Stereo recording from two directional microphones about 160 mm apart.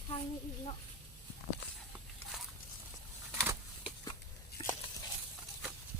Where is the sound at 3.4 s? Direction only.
10° right (ahead or behind).